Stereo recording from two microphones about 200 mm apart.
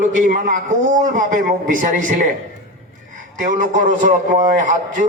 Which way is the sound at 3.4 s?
40° right (ahead or behind).